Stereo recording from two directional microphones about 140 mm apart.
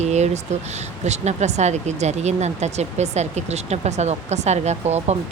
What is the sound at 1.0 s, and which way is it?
Speech, 55° right (ahead or behind).